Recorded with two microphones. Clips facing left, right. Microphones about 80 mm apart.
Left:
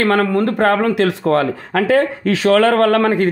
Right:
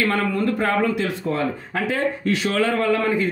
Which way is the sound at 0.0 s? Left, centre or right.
Left.